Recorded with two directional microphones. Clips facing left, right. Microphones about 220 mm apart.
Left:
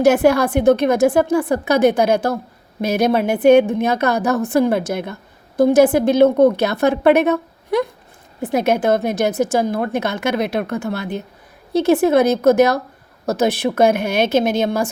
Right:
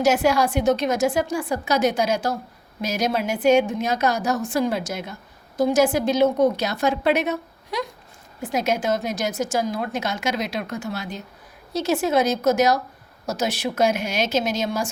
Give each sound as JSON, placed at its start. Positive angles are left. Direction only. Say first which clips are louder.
{"t": 0.0, "sound": "a woman's voice", "louder": "left 6 dB", "side_deg": 60}